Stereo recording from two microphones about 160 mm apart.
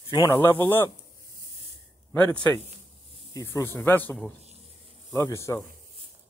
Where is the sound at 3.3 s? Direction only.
20° left (ahead or behind).